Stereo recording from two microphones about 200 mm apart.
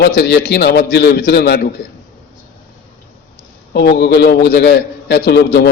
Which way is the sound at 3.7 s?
55° left (ahead or behind).